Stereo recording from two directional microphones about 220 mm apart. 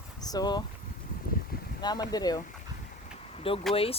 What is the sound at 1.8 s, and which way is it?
Speech, 20° left (ahead or behind).